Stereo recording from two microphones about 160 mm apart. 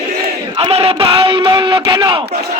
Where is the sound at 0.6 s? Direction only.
40° right (ahead or behind).